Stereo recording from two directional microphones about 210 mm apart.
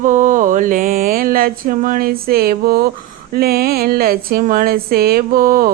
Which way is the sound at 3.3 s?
45° right (ahead or behind).